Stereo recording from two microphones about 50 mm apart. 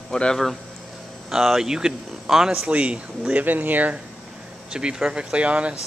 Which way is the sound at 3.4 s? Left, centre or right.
Right.